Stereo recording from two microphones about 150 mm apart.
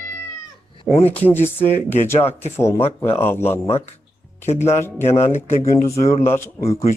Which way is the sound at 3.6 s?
45° left (ahead or behind).